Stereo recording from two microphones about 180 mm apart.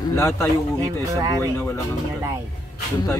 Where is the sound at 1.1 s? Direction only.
20° right (ahead or behind).